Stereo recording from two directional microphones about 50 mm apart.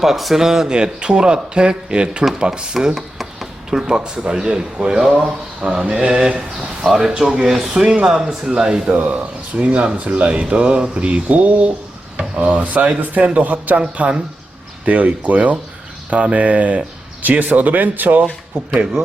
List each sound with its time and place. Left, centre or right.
0.0 s speech: centre
2.7 s speech: centre
5.2 s speech: right
14.8 s speech: right